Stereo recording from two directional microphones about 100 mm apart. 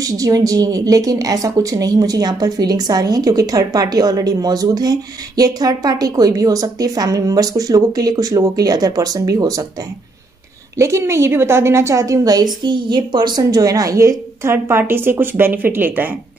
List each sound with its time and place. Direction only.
0.0 s a woman's voice: 35° right (ahead or behind)
10.8 s a woman's voice: 30° right (ahead or behind)